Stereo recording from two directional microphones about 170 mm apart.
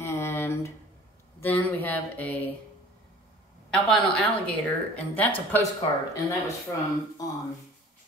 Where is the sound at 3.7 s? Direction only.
5° left (ahead or behind).